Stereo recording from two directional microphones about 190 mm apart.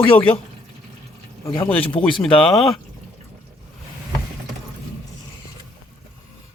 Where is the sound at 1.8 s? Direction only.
25° left (ahead or behind).